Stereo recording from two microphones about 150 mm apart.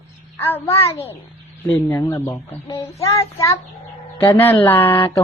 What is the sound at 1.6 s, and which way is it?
Speech, 15° left (ahead or behind).